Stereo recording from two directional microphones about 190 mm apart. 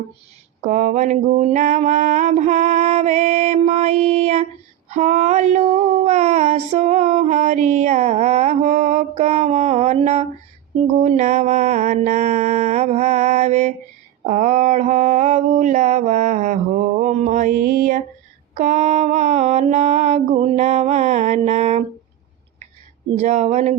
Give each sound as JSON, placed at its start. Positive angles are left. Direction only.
{"t": 0.6, "sound": "female singing", "side_deg": -40}
{"t": 10.9, "sound": "mantra", "side_deg": -40}
{"t": 23.1, "sound": "female singing", "side_deg": -40}